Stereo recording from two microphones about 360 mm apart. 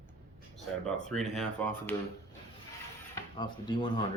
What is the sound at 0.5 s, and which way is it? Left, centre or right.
Speech, centre.